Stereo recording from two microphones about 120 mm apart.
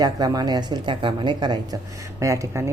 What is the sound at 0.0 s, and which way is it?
Speech, 35° right (ahead or behind).